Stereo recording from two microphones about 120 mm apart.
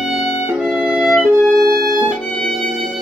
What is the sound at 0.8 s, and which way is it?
Music, 10° right (ahead or behind).